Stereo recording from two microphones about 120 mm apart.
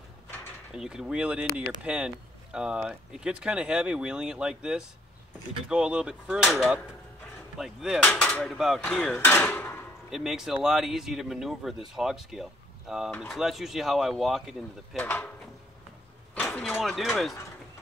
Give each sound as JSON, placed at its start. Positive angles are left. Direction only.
{"t": 0.7, "sound": "speech", "side_deg": -5}
{"t": 7.5, "sound": "speech", "side_deg": -5}
{"t": 8.0, "sound": "speech", "side_deg": 10}
{"t": 9.2, "sound": "speech", "side_deg": 20}
{"t": 10.1, "sound": "speech", "side_deg": -5}
{"t": 13.1, "sound": "speech", "side_deg": 10}
{"t": 15.0, "sound": "speech", "side_deg": 15}
{"t": 16.6, "sound": "speech", "side_deg": 5}